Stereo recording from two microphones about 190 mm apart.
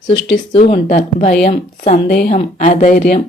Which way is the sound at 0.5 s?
35° left (ahead or behind).